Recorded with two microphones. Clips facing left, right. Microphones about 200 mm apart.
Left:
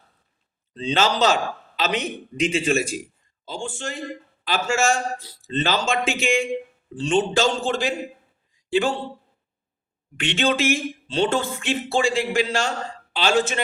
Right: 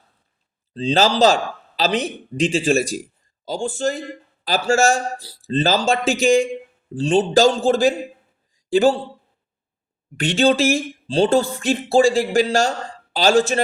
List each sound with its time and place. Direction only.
0.7 s a man's voice: 30° right (ahead or behind)
8.5 s a sound: 35° right (ahead or behind)
10.2 s speech: 40° right (ahead or behind)